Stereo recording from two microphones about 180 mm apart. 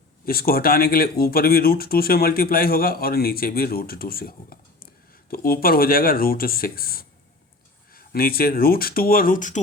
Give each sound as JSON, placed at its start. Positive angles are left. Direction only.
{"t": 0.3, "sound": "speech", "side_deg": 55}